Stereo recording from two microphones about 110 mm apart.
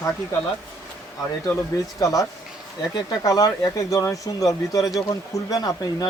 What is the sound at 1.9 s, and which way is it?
Speech, 35° left (ahead or behind).